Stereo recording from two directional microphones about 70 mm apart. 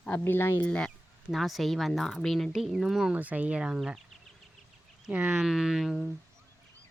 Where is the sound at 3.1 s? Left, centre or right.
Right.